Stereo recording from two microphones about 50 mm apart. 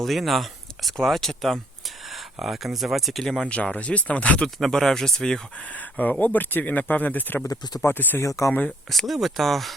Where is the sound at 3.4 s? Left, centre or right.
Left.